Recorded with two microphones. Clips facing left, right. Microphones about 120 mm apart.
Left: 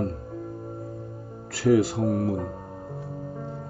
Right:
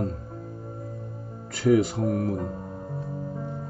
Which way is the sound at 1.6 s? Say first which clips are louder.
Left 1 dB; centre (ahead or behind).